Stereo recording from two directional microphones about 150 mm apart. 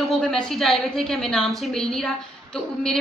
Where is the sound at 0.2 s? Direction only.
5° left (ahead or behind).